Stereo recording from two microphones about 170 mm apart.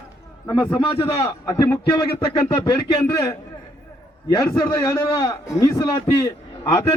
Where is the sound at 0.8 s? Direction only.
30° left (ahead or behind).